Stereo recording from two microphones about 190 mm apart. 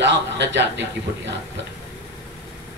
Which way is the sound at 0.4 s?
70° right (ahead or behind).